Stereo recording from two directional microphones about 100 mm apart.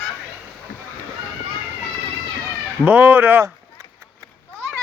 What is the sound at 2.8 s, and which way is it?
Speech, 20° right (ahead or behind).